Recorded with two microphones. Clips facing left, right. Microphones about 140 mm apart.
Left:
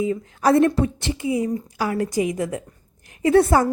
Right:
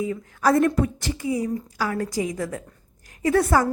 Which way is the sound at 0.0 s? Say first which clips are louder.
Left 2 dB; 25° left (ahead or behind).